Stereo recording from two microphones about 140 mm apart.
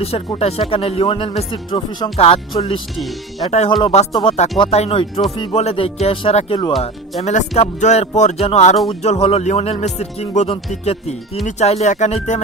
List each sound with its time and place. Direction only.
0.4 s speech: 45° left (ahead or behind)
3.4 s speech: 45° left (ahead or behind)
6.8 s speech: 50° left (ahead or behind)